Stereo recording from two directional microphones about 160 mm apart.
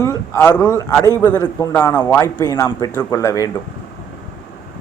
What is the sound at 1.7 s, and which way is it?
A man's voice, 10° left (ahead or behind).